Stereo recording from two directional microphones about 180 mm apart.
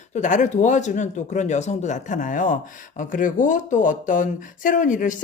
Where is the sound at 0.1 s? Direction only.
45° left (ahead or behind).